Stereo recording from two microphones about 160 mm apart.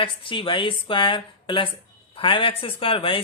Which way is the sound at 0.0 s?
30° left (ahead or behind).